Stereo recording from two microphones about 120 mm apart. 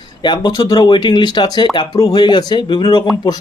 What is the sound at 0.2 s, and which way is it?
Speech, 40° left (ahead or behind).